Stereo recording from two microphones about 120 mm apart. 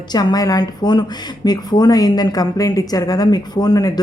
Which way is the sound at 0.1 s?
35° left (ahead or behind).